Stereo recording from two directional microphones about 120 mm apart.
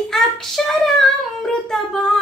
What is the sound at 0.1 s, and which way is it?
Child singing, 5° left (ahead or behind).